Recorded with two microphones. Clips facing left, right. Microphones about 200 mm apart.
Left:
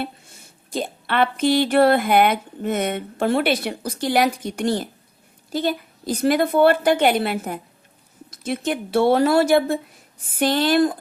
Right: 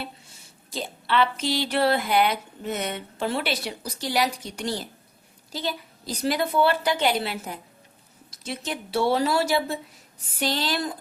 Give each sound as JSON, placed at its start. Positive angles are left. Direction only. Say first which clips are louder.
{"t": 0.0, "sound": "speech", "louder": "left 7 dB", "side_deg": 50}